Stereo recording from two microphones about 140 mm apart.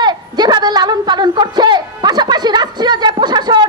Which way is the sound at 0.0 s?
30° right (ahead or behind).